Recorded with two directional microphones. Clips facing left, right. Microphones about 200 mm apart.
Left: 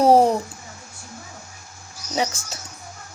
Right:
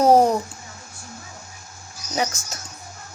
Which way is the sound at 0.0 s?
30° left (ahead or behind).